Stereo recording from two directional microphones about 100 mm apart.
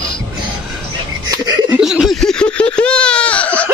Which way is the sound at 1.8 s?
5° right (ahead or behind).